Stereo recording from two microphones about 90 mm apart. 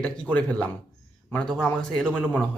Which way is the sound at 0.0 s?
15° left (ahead or behind).